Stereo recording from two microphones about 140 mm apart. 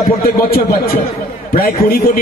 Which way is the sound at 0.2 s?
90° left.